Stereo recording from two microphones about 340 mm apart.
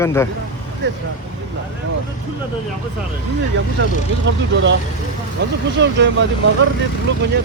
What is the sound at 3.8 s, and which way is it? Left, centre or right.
Speech, right.